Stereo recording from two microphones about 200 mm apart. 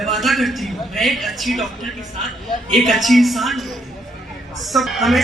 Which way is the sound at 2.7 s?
Centre (ahead or behind).